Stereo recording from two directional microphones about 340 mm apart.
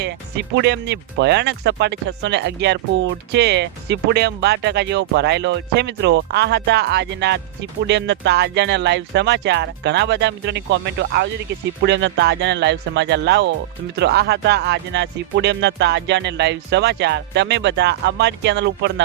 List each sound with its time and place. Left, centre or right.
0.0 s speech: right